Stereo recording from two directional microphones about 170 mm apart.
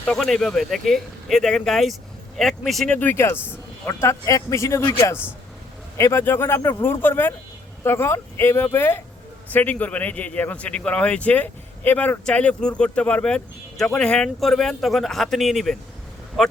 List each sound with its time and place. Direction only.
0.0 s a man's voice: 5° left (ahead or behind)